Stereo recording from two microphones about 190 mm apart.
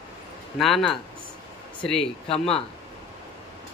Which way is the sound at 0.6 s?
Centre (ahead or behind).